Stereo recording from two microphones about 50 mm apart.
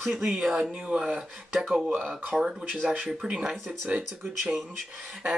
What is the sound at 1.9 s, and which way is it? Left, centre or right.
Speech, right.